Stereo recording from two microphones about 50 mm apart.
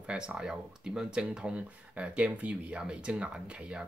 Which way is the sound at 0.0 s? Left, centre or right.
Right.